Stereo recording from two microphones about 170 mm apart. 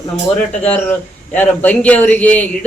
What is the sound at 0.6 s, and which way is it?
Speech, 10° left (ahead or behind).